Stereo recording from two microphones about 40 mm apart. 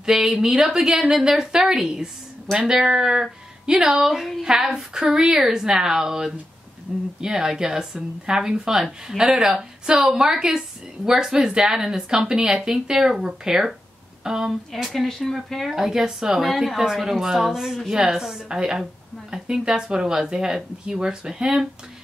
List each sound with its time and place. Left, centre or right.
0.1 s a woman's voice: centre
15.0 s speech: centre
15.7 s speech: centre
16.3 s speech: centre